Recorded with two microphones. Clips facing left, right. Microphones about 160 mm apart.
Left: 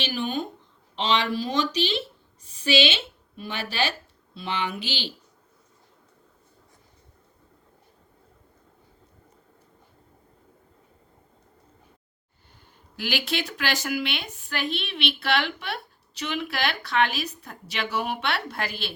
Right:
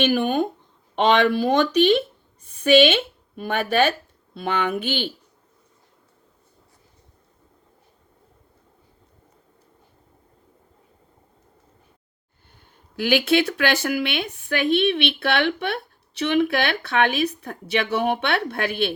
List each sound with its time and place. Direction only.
0.0 s speech: 55° right (ahead or behind)
13.0 s speech: 55° right (ahead or behind)